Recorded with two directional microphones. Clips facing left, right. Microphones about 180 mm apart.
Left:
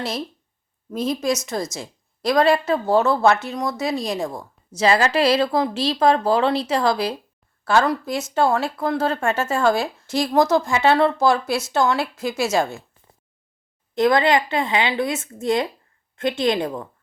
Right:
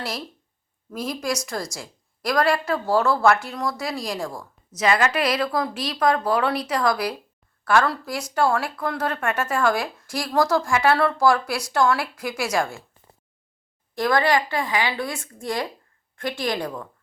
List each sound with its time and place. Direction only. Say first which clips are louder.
0.9 s a woman's voice: left 5 dB; 25° left (ahead or behind)
13.9 s a woman's voice: left 3 dB; 20° left (ahead or behind)